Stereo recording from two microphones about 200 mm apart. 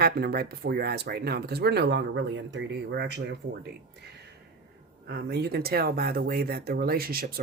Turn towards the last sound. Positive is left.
turn(degrees=-50)  # may be behind; listen again after turning